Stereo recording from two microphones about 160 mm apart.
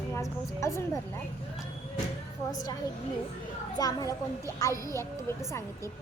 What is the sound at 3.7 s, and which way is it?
A child's voice, 20° left (ahead or behind).